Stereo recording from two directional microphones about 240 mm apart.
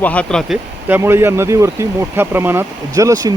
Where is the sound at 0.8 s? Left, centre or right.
Centre.